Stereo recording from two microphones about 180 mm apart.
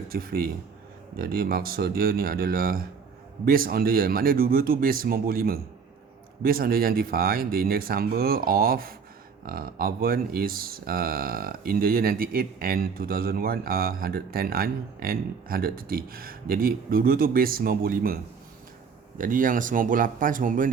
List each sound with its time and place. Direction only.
0.1 s speech: 55° right (ahead or behind)
19.2 s speech: 50° right (ahead or behind)